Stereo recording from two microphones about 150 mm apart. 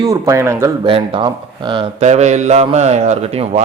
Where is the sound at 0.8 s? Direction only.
35° right (ahead or behind).